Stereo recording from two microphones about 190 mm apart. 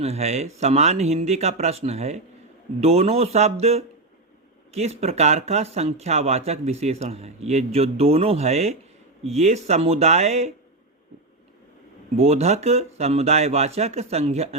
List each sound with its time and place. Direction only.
0.0 s speech: 35° right (ahead or behind)
12.1 s speech: 35° right (ahead or behind)